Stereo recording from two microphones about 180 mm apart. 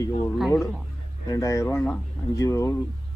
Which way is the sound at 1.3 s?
15° left (ahead or behind).